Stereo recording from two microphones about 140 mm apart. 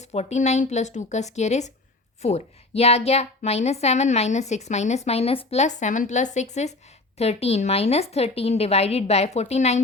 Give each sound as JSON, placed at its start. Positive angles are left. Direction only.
{"t": 0.0, "sound": "a woman's voice", "side_deg": 50}